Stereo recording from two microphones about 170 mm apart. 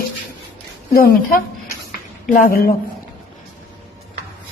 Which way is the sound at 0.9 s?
60° left (ahead or behind).